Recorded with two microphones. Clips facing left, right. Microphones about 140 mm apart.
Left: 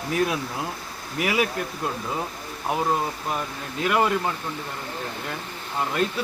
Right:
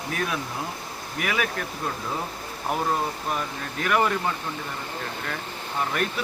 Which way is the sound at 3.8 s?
20° left (ahead or behind).